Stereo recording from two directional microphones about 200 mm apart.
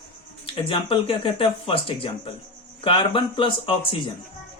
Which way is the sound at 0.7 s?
25° left (ahead or behind).